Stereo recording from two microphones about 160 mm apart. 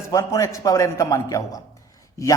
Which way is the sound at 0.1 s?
20° left (ahead or behind).